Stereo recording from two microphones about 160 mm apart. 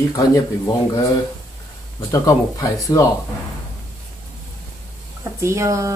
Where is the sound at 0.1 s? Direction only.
25° left (ahead or behind).